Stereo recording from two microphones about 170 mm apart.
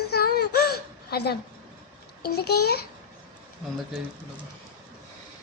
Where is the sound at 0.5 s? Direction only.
70° left (ahead or behind).